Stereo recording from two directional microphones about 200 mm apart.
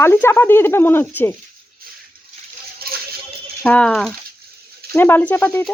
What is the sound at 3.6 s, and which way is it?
Frying, 5° left (ahead or behind).